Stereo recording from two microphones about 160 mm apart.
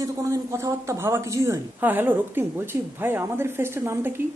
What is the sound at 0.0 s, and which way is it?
A man's voice, 20° right (ahead or behind).